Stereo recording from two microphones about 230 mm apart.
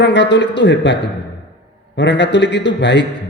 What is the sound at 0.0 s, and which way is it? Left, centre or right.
Speech, left.